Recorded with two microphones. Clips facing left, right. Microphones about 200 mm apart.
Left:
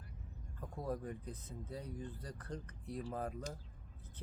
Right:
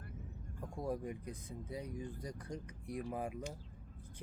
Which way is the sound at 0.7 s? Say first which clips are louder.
Right 2 dB; 10° right (ahead or behind).